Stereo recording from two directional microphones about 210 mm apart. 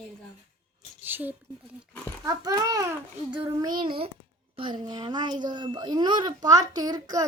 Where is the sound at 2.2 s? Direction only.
15° right (ahead or behind).